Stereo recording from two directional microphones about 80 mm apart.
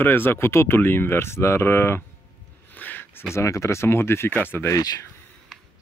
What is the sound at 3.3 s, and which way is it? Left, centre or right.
Speech, left.